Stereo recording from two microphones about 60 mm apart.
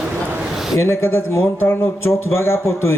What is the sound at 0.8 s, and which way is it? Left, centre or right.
Speech, left.